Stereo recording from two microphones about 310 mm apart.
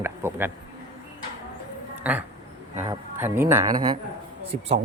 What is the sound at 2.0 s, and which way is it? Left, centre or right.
Speech, centre.